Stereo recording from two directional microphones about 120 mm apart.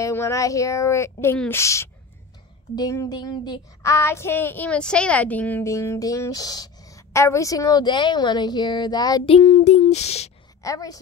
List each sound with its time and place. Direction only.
0.0 s a woman's voice: 25° left (ahead or behind)
3.8 s a woman's voice: 20° left (ahead or behind)
5.7 s a woman's voice: 25° left (ahead or behind)
9.2 s child singing: 60° left (ahead or behind)
10.6 s a woman's voice: 30° left (ahead or behind)